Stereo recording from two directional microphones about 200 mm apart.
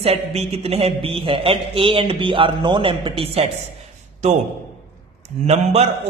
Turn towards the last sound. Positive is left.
turn(degrees=-30)  # may be behind; listen again after turning